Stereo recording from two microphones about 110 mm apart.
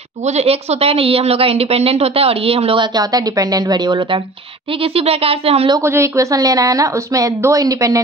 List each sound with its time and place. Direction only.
0.4 s a woman's voice: 70° right (ahead or behind)
3.0 s a woman's voice: 35° right (ahead or behind)
4.9 s a woman's voice: 60° right (ahead or behind)
5.9 s a woman's voice: 25° right (ahead or behind)